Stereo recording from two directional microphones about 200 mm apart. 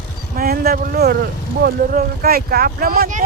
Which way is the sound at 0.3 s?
50° right (ahead or behind).